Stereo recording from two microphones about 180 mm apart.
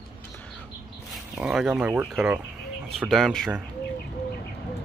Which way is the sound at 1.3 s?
5° right (ahead or behind).